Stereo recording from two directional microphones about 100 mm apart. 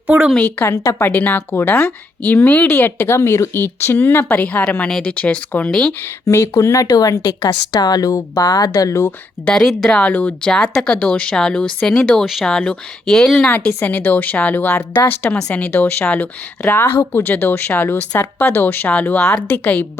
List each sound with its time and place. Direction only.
0.6 s a woman's voice: 25° left (ahead or behind); by 5.9 s 5° left (ahead or behind)
6.2 s speech: 30° left (ahead or behind)
9.5 s a woman's voice: 5° left (ahead or behind)
13.5 s a woman's voice: 20° left (ahead or behind)